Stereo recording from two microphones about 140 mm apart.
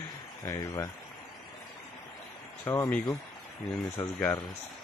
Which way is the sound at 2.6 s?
20° left (ahead or behind).